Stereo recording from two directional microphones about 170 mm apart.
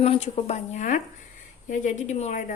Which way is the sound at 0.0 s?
35° left (ahead or behind).